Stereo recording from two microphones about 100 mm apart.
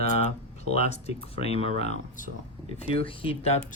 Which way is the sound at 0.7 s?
90° left.